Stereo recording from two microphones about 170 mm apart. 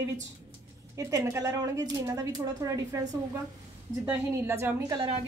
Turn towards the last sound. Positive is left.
turn(degrees=-20)  # may be behind; listen again after turning